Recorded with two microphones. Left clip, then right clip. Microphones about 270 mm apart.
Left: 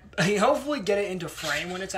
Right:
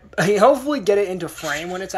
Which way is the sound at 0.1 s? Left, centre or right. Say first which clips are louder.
Right 8 dB; centre.